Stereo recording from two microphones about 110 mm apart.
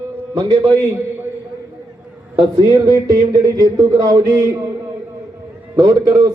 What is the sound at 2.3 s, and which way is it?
A man's voice, 45° right (ahead or behind).